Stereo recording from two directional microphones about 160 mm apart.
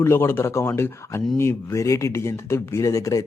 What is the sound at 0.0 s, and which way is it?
Speech, 15° left (ahead or behind).